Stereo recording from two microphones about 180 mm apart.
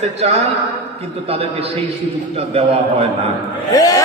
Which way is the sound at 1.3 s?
35° right (ahead or behind).